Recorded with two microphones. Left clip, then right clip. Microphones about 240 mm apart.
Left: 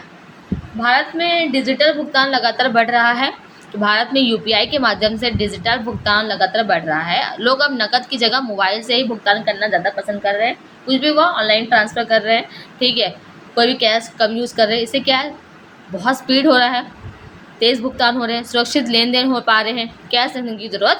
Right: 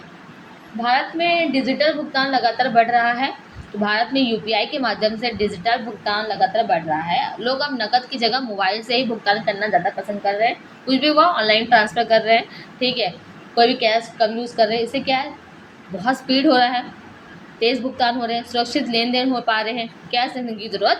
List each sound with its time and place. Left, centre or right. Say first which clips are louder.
0.8 s a woman's voice: left 3 dB; left